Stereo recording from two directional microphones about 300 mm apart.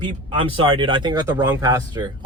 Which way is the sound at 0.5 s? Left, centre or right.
Centre.